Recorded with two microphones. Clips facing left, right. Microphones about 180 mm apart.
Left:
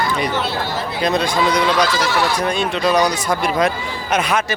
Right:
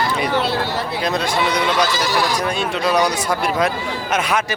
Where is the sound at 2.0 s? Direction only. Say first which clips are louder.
Left 1 dB; 35° right (ahead or behind).